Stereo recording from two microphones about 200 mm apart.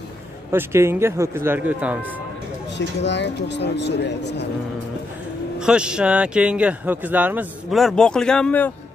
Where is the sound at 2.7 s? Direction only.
60° left (ahead or behind).